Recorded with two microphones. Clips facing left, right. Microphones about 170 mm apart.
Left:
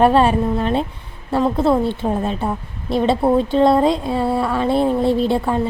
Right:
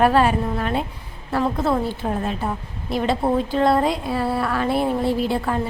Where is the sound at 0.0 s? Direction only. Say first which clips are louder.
Left 3 dB; 25° left (ahead or behind).